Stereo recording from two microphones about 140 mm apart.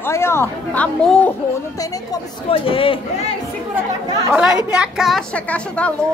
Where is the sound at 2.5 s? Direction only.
40° left (ahead or behind).